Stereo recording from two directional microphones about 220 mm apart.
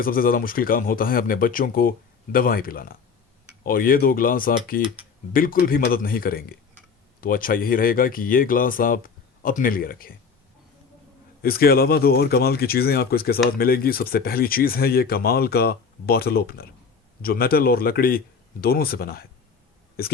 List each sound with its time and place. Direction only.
0.0 s speech: 40° left (ahead or behind)
11.4 s speech: 45° left (ahead or behind)